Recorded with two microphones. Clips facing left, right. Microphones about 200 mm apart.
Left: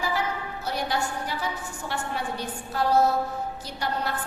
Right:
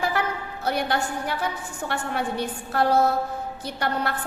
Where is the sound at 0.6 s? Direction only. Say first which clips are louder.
Right 4 dB; 60° right (ahead or behind).